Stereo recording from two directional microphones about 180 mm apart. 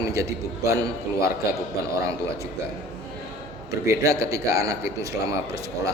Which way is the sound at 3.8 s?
15° right (ahead or behind).